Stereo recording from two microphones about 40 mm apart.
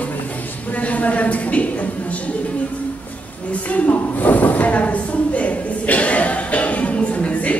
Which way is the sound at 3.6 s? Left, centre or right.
Left.